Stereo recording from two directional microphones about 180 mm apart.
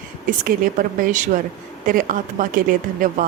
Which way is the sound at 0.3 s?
50° right (ahead or behind).